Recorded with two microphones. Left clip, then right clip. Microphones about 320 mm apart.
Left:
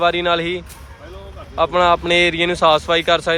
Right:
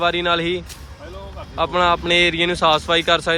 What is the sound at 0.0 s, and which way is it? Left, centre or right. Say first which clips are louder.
Speech: left 2 dB; centre.